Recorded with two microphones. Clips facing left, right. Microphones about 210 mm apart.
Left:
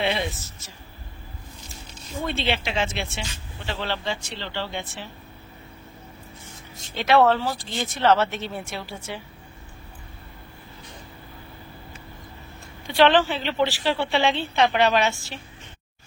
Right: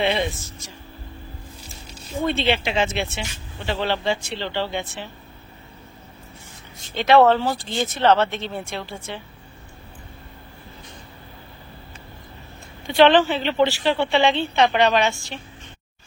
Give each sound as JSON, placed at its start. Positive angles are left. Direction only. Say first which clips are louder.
{"t": 0.0, "sound": "speech", "louder": "right 3 dB", "side_deg": 5}
{"t": 2.0, "sound": "a sound", "louder": "right 6 dB", "side_deg": -10}
{"t": 2.3, "sound": "speech", "louder": "right 2 dB", "side_deg": 0}
{"t": 3.8, "sound": "speech", "louder": "right 6 dB", "side_deg": -20}
{"t": 6.8, "sound": "speech", "louder": "right 3 dB", "side_deg": 0}
{"t": 12.9, "sound": "speech", "louder": "right 3 dB", "side_deg": 0}